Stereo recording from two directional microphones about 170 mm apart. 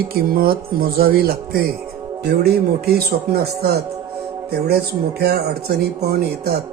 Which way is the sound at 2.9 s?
65° right (ahead or behind).